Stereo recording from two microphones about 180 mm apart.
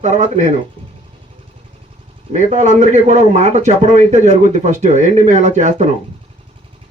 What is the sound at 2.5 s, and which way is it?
A man's voice, 40° right (ahead or behind).